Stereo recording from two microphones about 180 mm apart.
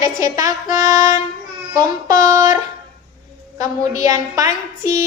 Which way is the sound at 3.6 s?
20° right (ahead or behind).